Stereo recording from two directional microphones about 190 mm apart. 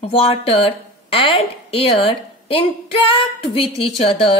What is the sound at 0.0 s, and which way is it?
A woman's voice, 30° left (ahead or behind).